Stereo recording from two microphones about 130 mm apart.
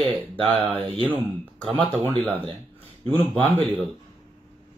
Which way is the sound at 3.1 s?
15° left (ahead or behind).